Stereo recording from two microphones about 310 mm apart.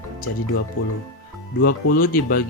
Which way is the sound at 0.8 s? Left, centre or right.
Left.